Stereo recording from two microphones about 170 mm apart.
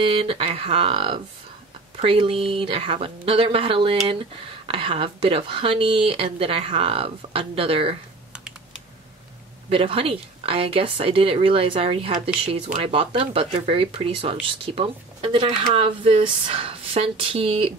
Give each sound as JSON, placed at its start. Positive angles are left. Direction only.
{"t": 0.0, "sound": "a woman's voice", "side_deg": -35}
{"t": 9.7, "sound": "a woman's voice", "side_deg": -30}
{"t": 13.3, "sound": "a woman's voice", "side_deg": -35}